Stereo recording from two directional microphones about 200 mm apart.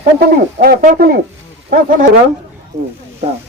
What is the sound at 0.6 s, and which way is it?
Speech, 45° right (ahead or behind).